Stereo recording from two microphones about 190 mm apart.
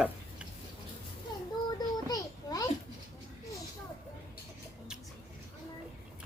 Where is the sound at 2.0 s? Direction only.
20° left (ahead or behind).